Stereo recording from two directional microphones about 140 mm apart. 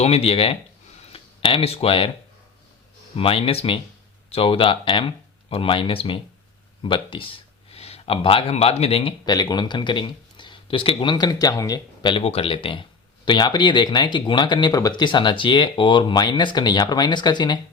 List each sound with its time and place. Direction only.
0.0 s speech: 45° left (ahead or behind)
3.2 s speech: 40° left (ahead or behind)
9.2 s speech: 30° left (ahead or behind)